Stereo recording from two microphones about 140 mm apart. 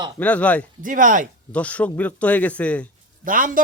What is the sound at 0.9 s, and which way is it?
Speech, 70° right (ahead or behind).